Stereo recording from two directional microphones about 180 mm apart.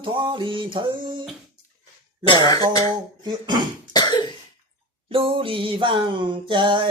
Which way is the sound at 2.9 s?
25° right (ahead or behind).